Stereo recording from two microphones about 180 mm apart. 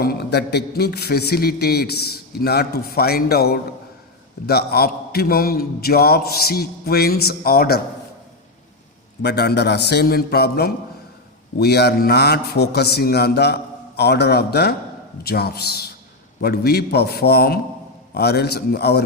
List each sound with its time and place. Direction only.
0.0 s a man's voice: 60° left (ahead or behind)
9.2 s a man's voice: 65° left (ahead or behind)